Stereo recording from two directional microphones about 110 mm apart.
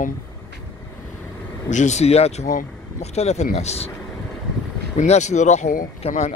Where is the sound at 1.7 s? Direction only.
90° left; by 3.9 s 75° left (ahead or behind).